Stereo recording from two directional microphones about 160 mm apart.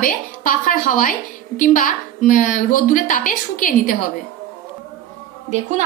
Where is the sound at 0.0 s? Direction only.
60° left (ahead or behind).